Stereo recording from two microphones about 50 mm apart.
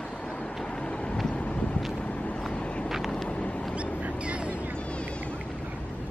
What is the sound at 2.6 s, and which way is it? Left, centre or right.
Vehicle, left.